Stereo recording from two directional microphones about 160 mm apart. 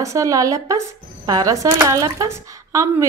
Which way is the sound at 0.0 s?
20° right (ahead or behind).